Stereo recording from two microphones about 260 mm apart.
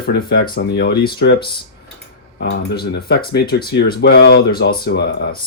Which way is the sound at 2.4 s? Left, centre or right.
Left.